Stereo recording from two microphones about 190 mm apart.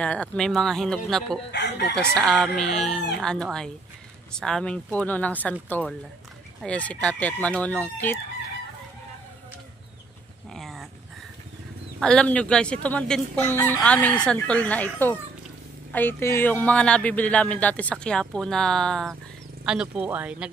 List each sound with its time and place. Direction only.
0.0 s speech: 5° left (ahead or behind)
1.5 s chicken: 60° left (ahead or behind)
2.0 s speech: 5° left (ahead or behind)
10.5 s dog: centre (ahead or behind)
12.0 s speech: 5° left (ahead or behind)